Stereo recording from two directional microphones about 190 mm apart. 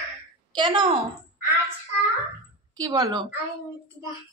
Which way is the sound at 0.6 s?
25° right (ahead or behind).